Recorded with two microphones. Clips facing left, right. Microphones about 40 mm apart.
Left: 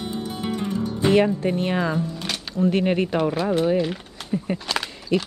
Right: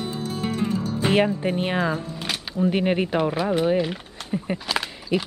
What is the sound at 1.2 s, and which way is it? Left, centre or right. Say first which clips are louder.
Speech: left 1 dB; centre.